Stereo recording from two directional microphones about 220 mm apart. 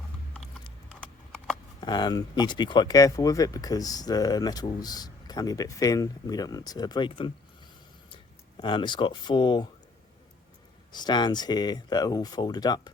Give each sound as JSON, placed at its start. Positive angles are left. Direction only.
{"t": 0.9, "sound": "a sound", "side_deg": 5}
{"t": 1.8, "sound": "speech", "side_deg": 20}
{"t": 10.9, "sound": "speech", "side_deg": 20}